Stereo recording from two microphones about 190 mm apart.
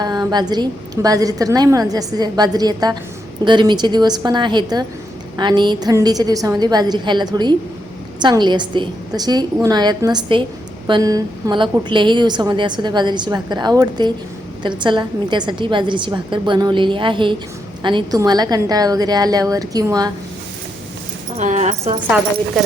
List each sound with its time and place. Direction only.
0.0 s a woman's voice: 20° right (ahead or behind)
21.3 s speech: 40° right (ahead or behind)